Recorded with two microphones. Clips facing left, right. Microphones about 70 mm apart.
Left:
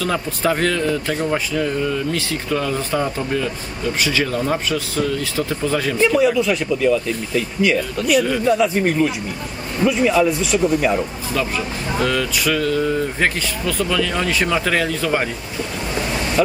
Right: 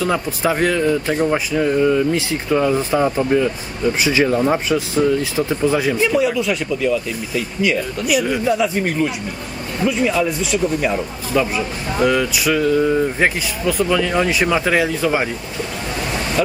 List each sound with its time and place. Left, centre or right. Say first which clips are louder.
0.0 s speech: right 2 dB; centre
6.0 s speech: left 1 dB; centre
11.3 s speech: right 4 dB; centre